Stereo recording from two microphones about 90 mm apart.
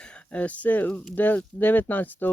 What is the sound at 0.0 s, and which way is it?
Speech, 15° left (ahead or behind).